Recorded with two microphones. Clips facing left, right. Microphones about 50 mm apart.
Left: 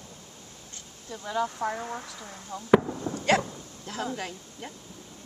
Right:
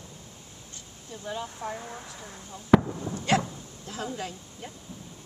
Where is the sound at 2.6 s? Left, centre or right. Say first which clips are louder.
Even; centre.